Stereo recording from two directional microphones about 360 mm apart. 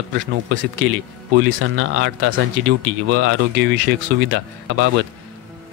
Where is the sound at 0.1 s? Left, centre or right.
Right.